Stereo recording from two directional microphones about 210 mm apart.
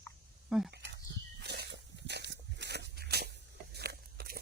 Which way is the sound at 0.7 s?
55° right (ahead or behind).